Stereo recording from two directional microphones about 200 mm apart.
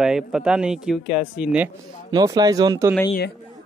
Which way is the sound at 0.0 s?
5° right (ahead or behind).